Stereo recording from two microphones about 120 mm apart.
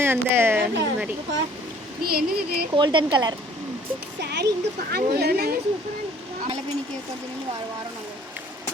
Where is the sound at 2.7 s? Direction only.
40° right (ahead or behind).